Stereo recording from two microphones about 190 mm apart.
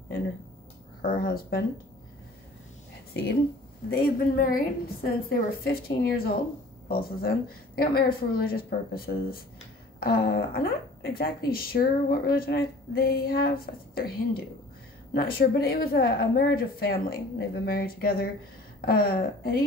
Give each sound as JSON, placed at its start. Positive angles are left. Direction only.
{"t": 1.0, "sound": "a woman's voice", "side_deg": 50}
{"t": 3.9, "sound": "a woman's voice", "side_deg": 50}